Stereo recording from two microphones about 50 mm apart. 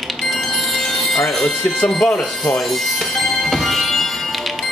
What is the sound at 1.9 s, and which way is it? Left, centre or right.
Music, centre.